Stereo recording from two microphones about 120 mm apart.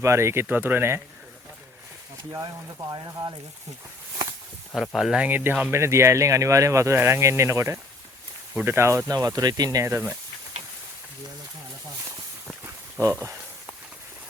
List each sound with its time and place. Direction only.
0.0 s speech: 25° right (ahead or behind)
2.4 s speech: 35° right (ahead or behind)
4.9 s speech: centre (ahead or behind)
5.2 s speech: 15° right (ahead or behind)
12.6 s a sound: 25° right (ahead or behind)